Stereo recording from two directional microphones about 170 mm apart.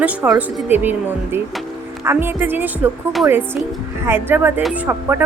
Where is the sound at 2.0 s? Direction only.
15° right (ahead or behind).